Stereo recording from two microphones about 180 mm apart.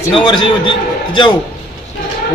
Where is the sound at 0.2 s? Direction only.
25° left (ahead or behind).